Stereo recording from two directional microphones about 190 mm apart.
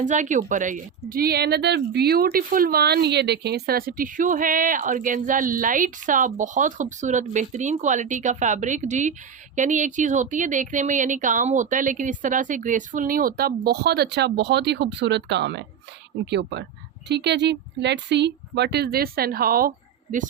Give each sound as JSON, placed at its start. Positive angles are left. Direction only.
{"t": 0.0, "sound": "speech", "side_deg": -40}